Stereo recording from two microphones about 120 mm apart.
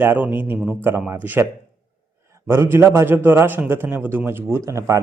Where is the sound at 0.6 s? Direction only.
5° left (ahead or behind).